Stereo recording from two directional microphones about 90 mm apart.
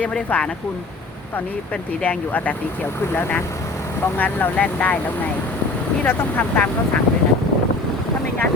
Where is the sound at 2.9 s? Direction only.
30° left (ahead or behind).